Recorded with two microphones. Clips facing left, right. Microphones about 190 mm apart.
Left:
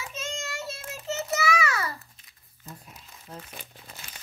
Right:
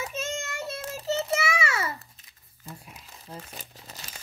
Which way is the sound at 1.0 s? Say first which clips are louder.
Right 1 dB; 30° right (ahead or behind).